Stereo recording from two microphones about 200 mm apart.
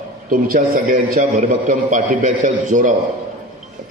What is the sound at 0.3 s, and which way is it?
A man's voice, 45° right (ahead or behind).